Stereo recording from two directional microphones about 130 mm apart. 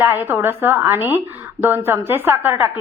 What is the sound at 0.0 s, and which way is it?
A woman's voice, 15° right (ahead or behind).